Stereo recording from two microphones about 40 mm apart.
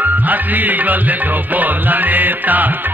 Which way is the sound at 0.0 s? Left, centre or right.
Right.